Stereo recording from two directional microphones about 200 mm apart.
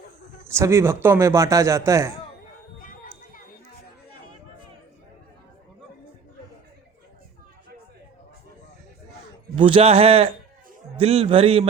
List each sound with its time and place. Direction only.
0.5 s a man's voice: 15° right (ahead or behind)
2.7 s a sound: 45° left (ahead or behind)
9.6 s a man's voice: 25° right (ahead or behind)